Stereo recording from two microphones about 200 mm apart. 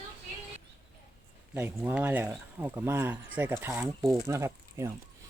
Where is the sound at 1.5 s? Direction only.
10° right (ahead or behind).